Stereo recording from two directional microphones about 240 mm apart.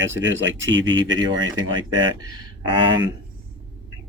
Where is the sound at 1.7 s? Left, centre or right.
Centre.